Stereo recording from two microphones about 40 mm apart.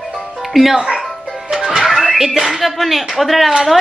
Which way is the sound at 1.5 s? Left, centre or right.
Centre.